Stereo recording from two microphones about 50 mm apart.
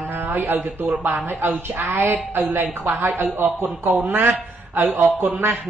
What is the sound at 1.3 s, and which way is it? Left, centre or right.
A man's voice, right.